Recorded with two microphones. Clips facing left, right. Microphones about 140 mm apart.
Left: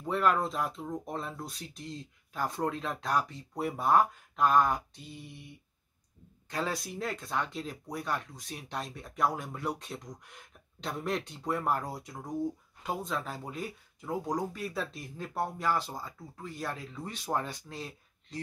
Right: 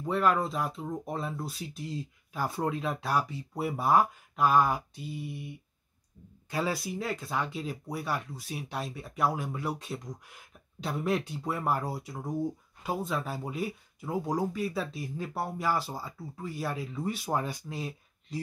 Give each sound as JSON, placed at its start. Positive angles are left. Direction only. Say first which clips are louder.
{"t": 0.0, "sound": "speech", "louder": "right 1 dB", "side_deg": 0}
{"t": 6.5, "sound": "speech", "louder": "right 3 dB", "side_deg": -5}